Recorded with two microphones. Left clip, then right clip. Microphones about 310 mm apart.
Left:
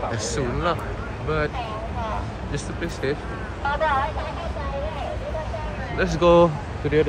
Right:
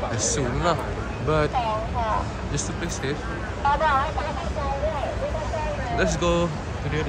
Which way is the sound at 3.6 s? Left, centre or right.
Right.